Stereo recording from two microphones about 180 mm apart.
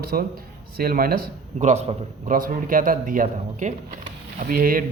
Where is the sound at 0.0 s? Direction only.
60° right (ahead or behind).